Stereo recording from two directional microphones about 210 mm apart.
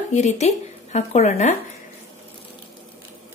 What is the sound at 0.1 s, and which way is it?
Speech, 35° left (ahead or behind).